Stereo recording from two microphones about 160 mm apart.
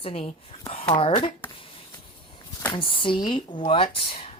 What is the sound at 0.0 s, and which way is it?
A woman's voice, 40° left (ahead or behind).